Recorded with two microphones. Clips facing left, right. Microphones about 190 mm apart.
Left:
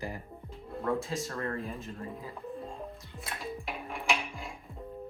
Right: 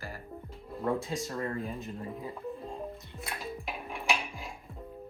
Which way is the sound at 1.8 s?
20° right (ahead or behind).